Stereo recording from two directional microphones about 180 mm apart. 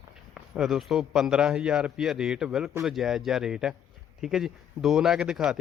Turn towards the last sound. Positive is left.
turn(degrees=-5)  # may be behind; listen again after turning